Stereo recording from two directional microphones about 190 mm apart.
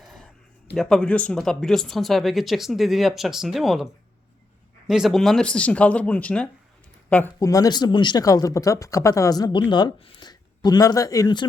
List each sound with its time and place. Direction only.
0.0 s a sound: centre (ahead or behind)
0.7 s speech: centre (ahead or behind)
4.9 s speech: centre (ahead or behind); by 11.4 s 20° left (ahead or behind)